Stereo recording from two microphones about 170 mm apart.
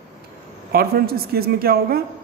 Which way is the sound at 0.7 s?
65° right (ahead or behind).